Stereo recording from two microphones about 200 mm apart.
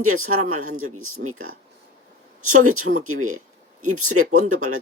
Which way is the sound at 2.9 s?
90° right.